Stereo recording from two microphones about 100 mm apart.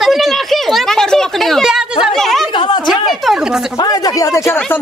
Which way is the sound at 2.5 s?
55° left (ahead or behind).